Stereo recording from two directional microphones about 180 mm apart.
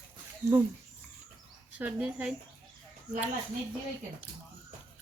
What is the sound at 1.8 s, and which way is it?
Child singing, 5° right (ahead or behind).